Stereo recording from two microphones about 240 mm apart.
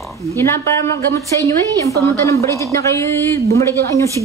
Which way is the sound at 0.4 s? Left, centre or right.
Centre.